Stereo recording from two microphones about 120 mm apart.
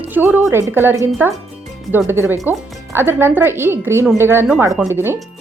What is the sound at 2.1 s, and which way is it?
A woman's voice, 20° right (ahead or behind).